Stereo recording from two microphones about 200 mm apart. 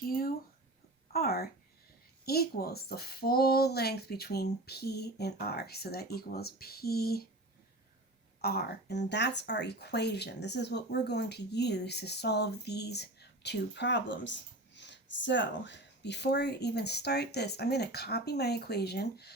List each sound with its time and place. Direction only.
0.0 s a sound: 45° left (ahead or behind)
1.1 s speech: 50° left (ahead or behind)
8.4 s speech: 50° left (ahead or behind)